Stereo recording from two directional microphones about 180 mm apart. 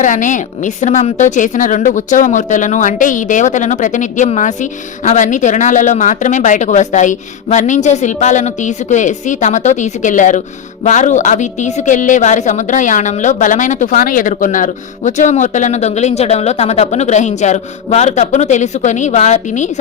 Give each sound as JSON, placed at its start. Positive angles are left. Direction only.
{"t": 0.0, "sound": "a woman's voice", "side_deg": 45}